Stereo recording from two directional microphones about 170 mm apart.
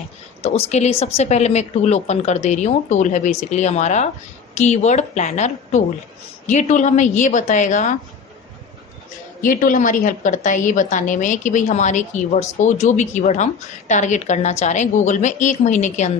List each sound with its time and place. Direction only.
0.7 s a woman's voice: 40° left (ahead or behind)
9.4 s a woman's voice: 50° left (ahead or behind)